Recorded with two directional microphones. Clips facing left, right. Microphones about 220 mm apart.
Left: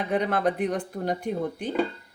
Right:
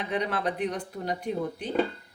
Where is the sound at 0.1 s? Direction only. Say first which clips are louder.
Left 5 dB; 50° left (ahead or behind).